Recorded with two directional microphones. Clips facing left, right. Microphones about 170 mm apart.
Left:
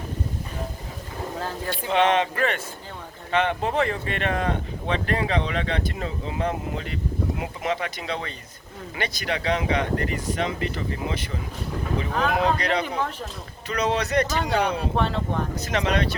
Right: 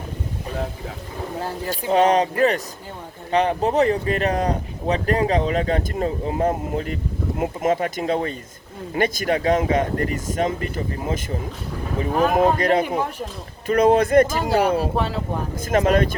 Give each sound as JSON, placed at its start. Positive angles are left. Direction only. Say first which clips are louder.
{"t": 1.6, "sound": "speech", "louder": "right 4 dB", "side_deg": -40}
{"t": 3.3, "sound": "speech", "louder": "right 4 dB", "side_deg": -35}
{"t": 14.3, "sound": "speech", "louder": "right 5 dB", "side_deg": -5}
{"t": 15.5, "sound": "speech", "louder": "right 9 dB", "side_deg": -50}